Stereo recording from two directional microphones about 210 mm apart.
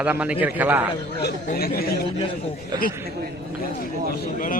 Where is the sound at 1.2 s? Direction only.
45° left (ahead or behind).